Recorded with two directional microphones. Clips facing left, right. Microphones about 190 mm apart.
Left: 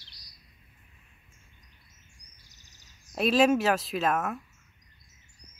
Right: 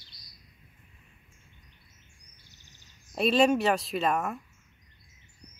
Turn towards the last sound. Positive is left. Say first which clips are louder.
# even
turn(degrees=0)  # may be behind; listen again after turning